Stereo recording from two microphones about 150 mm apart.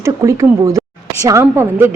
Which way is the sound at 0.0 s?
20° right (ahead or behind).